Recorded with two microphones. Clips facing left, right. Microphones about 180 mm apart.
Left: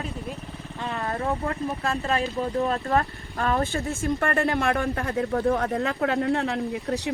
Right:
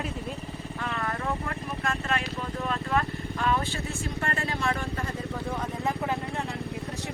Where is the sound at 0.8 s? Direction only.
30° left (ahead or behind).